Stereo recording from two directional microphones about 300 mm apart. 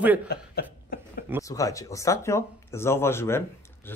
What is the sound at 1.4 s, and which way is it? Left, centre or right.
Speech, centre.